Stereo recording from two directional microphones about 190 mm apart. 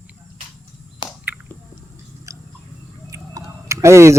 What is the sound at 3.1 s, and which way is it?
Tick-tock, 15° right (ahead or behind).